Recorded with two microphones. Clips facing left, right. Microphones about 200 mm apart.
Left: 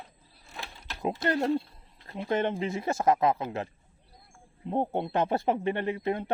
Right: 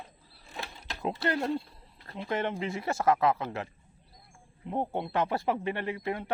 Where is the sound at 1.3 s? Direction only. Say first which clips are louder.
Left 4 dB; 25° left (ahead or behind).